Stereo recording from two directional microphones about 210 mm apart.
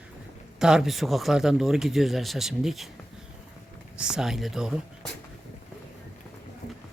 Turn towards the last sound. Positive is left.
turn(degrees=0)  # may be behind; listen again after turning